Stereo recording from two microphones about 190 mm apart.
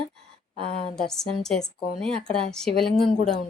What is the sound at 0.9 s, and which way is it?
A woman's voice, centre (ahead or behind).